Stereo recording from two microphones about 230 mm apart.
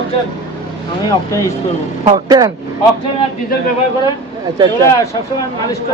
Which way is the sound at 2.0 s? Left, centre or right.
Centre.